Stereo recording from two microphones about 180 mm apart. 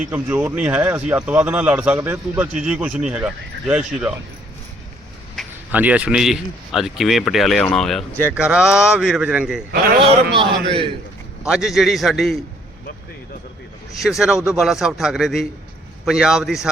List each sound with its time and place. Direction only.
0.1 s speech: 10° right (ahead or behind)
5.7 s a man's voice: 10° right (ahead or behind)
10.3 s a man's voice: 30° right (ahead or behind)
11.4 s a man's voice: 5° right (ahead or behind)
14.0 s a man's voice: centre (ahead or behind)